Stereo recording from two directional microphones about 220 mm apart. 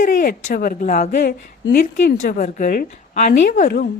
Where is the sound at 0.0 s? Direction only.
40° left (ahead or behind).